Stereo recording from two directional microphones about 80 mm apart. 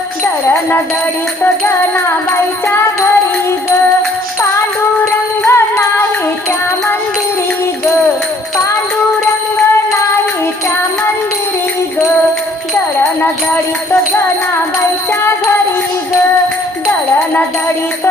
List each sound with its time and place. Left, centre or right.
0.4 s music: left
5.5 s music: left